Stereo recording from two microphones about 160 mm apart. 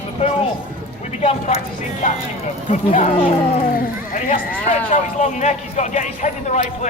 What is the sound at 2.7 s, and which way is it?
Speech, 50° left (ahead or behind).